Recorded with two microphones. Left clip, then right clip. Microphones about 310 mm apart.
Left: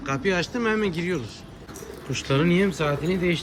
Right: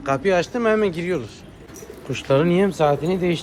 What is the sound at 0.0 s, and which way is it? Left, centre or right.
Speech, centre.